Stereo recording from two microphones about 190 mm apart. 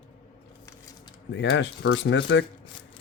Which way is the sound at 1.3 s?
75° left (ahead or behind).